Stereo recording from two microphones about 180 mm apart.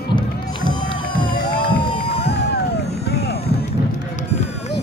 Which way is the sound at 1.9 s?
30° left (ahead or behind).